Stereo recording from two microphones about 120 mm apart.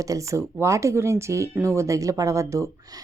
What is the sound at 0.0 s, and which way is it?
Speech, 25° right (ahead or behind).